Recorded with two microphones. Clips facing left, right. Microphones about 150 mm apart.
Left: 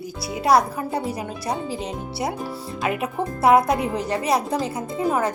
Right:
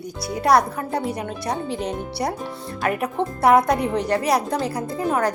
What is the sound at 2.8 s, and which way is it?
Speech, 5° left (ahead or behind).